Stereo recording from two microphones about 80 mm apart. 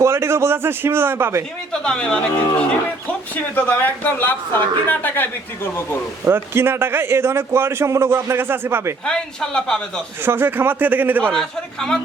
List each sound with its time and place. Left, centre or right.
0.0 s a man's voice: right
1.7 s a man's voice: centre
3.3 s a man's voice: left
6.2 s a man's voice: right
9.0 s a man's voice: centre
10.2 s a man's voice: right
11.3 s a man's voice: centre